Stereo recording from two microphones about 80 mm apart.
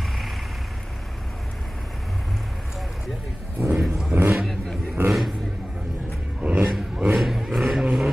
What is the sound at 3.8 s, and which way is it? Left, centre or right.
Vehicle, centre.